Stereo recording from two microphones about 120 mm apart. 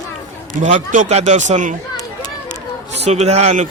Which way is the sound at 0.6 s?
85° right.